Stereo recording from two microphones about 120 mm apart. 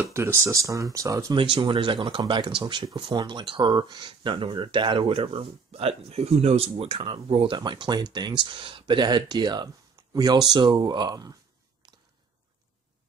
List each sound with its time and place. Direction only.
0.1 s speech: 20° right (ahead or behind)
1.3 s speech: 45° right (ahead or behind)